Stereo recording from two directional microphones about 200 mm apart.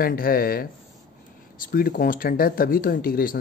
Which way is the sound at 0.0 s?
45° left (ahead or behind).